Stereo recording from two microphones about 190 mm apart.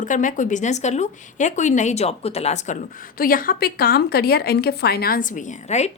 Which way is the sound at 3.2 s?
50° left (ahead or behind).